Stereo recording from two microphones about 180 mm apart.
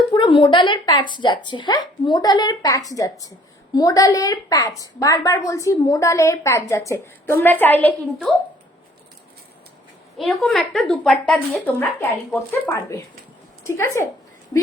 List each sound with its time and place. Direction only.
0.1 s a woman's voice: 30° left (ahead or behind); by 8.3 s 10° left (ahead or behind)
10.2 s a woman's voice: 5° left (ahead or behind)